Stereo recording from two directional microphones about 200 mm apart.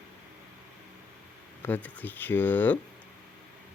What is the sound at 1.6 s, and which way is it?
Speech, 10° left (ahead or behind).